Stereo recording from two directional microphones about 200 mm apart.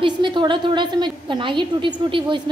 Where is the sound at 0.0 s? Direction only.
25° right (ahead or behind).